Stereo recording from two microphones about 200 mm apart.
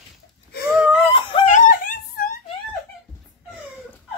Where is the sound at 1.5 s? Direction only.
45° left (ahead or behind).